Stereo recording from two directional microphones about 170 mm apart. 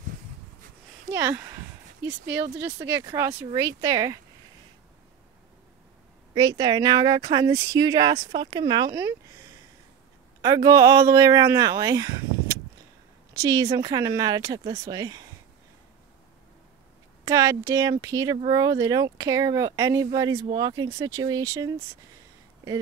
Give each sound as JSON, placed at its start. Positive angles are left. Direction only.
{"t": 1.1, "sound": "a sound", "side_deg": -15}
{"t": 2.3, "sound": "speech", "side_deg": -15}
{"t": 6.3, "sound": "speech", "side_deg": -25}
{"t": 8.9, "sound": "speech", "side_deg": -15}
{"t": 17.2, "sound": "speech", "side_deg": -20}